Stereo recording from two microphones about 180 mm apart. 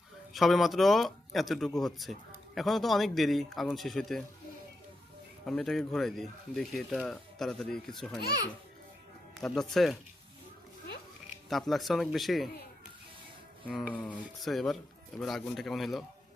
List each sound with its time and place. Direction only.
0.3 s speech: centre (ahead or behind)
5.5 s speech: centre (ahead or behind)
8.2 s a child's voice: 60° left (ahead or behind)
9.4 s speech: centre (ahead or behind)
11.4 s speech: centre (ahead or behind)
13.9 s speech: 5° left (ahead or behind)